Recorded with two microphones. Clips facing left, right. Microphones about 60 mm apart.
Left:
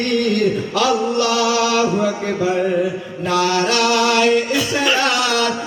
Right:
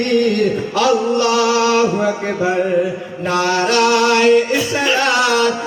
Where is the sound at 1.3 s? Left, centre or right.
Right.